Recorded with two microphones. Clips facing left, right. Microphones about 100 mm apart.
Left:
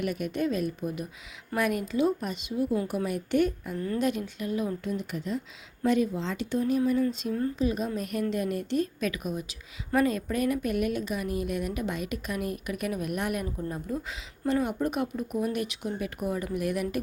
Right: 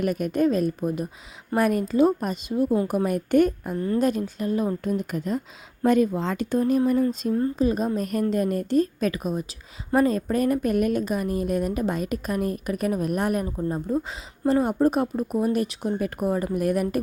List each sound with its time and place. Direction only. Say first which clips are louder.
0.0 s a woman's voice: right 7 dB; 45° right (ahead or behind)